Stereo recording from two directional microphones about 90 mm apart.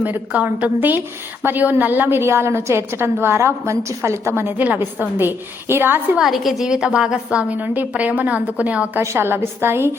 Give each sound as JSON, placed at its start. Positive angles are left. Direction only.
{"t": 0.0, "sound": "a woman's voice", "side_deg": -20}
{"t": 6.1, "sound": "a woman's voice", "side_deg": 0}
{"t": 9.0, "sound": "a woman's voice", "side_deg": -30}